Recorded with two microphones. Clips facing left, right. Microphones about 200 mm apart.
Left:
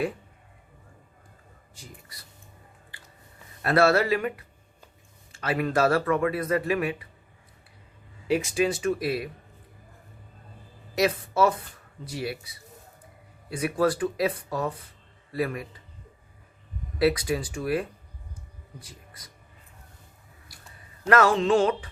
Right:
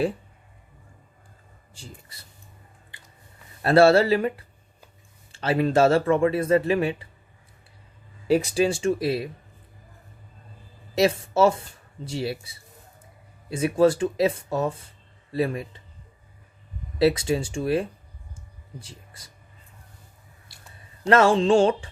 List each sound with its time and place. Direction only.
1.7 s speech: 30° right (ahead or behind)
2.9 s a sound: 20° right (ahead or behind)
3.6 s speech: 30° right (ahead or behind)
8.3 s speech: 35° right (ahead or behind)
10.9 s speech: 25° right (ahead or behind)
17.0 s speech: 25° right (ahead or behind)
20.5 s a sound: 25° right (ahead or behind)
21.0 s speech: 25° right (ahead or behind)